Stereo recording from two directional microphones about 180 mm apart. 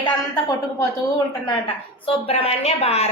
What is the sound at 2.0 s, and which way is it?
A woman's voice, 35° left (ahead or behind).